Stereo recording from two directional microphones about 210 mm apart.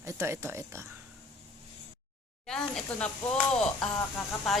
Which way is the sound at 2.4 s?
5° left (ahead or behind).